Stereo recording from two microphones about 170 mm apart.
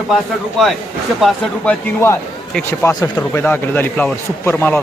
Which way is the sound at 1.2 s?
10° left (ahead or behind).